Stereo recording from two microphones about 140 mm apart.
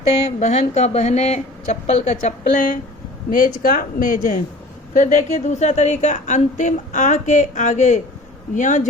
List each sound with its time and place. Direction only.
0.1 s speech: 50° left (ahead or behind); by 2.7 s 65° left (ahead or behind)
3.2 s speech: 80° left
4.9 s a woman's voice: 65° left (ahead or behind)